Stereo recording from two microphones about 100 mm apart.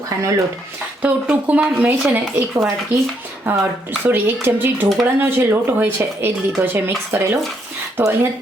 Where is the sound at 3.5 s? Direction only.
25° right (ahead or behind).